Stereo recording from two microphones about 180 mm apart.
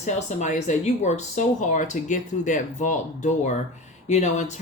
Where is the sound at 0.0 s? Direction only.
40° left (ahead or behind).